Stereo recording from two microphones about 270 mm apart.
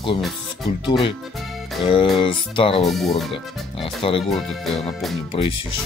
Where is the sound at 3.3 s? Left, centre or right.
Left.